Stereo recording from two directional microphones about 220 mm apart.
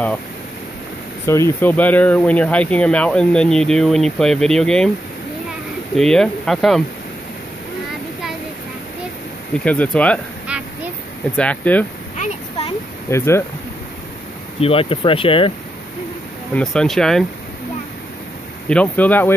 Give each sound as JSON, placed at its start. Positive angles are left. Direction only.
{"t": 1.2, "sound": "speech", "side_deg": 10}
{"t": 5.9, "sound": "speech", "side_deg": 5}
{"t": 9.7, "sound": "speech", "side_deg": 5}
{"t": 10.5, "sound": "quack", "side_deg": -5}
{"t": 11.3, "sound": "speech", "side_deg": 5}
{"t": 12.2, "sound": "a sound", "side_deg": 25}
{"t": 13.1, "sound": "speech", "side_deg": 10}
{"t": 14.6, "sound": "speech", "side_deg": 25}
{"t": 16.5, "sound": "speech", "side_deg": 0}
{"t": 18.7, "sound": "speech", "side_deg": 5}